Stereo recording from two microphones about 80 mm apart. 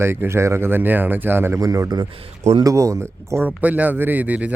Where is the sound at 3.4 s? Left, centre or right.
Centre.